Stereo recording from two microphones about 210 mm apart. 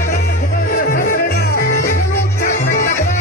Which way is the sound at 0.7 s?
40° left (ahead or behind).